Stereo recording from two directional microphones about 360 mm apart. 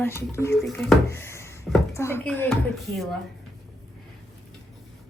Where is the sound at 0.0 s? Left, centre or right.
Centre.